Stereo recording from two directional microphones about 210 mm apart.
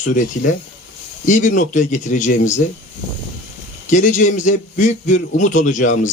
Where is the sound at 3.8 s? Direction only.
35° left (ahead or behind).